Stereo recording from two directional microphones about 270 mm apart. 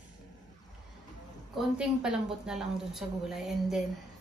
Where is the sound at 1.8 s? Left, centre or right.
Centre.